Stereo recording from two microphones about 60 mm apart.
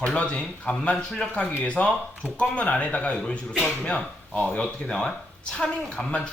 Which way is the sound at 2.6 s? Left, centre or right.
Left.